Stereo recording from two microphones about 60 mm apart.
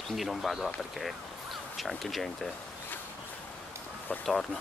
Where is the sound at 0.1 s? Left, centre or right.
Centre.